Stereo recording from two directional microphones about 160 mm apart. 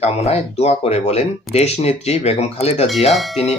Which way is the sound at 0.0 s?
40° left (ahead or behind).